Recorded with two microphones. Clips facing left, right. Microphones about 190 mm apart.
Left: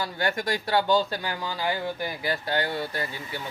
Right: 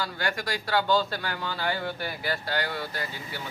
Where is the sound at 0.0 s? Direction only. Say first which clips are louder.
Left 3 dB; 20° left (ahead or behind).